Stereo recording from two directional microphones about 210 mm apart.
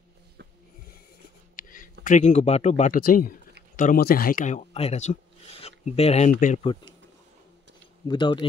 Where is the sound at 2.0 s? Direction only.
35° left (ahead or behind).